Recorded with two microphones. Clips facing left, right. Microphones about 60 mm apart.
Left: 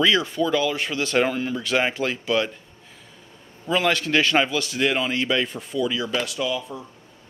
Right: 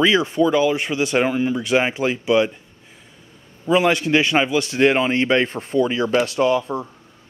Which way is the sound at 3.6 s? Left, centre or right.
Right.